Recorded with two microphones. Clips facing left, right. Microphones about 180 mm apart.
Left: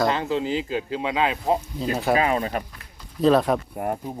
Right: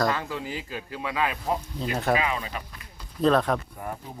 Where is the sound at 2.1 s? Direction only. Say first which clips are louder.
Left 6 dB; 40° left (ahead or behind).